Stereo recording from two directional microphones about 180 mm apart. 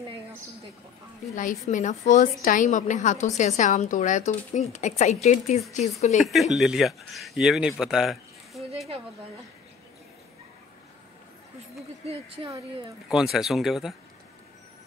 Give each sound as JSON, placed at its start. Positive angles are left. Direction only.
{"t": 1.7, "sound": "a woman's voice", "side_deg": 45}
{"t": 6.2, "sound": "speech", "side_deg": 0}
{"t": 7.8, "sound": "a sound", "side_deg": 0}
{"t": 13.1, "sound": "speech", "side_deg": 0}